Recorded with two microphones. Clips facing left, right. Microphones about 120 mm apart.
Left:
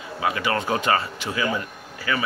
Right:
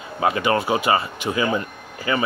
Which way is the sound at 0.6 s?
10° right (ahead or behind).